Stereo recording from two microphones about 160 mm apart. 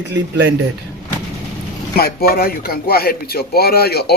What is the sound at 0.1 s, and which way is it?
Speech, 90° right.